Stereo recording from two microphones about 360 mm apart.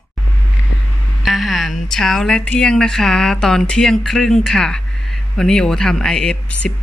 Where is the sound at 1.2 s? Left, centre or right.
Centre.